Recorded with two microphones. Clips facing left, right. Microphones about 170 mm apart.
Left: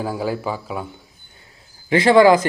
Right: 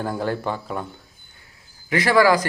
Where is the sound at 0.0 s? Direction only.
5° left (ahead or behind).